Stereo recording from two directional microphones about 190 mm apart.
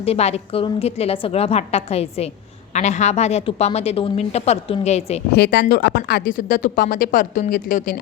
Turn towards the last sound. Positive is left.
turn(degrees=45)  # may be behind; listen again after turning